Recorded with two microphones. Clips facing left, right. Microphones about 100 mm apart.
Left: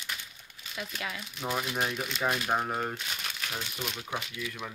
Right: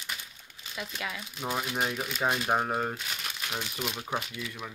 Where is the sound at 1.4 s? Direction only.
10° right (ahead or behind).